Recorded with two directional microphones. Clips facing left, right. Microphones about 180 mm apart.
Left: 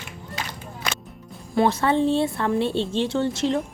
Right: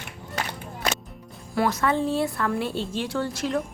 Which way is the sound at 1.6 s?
30° left (ahead or behind).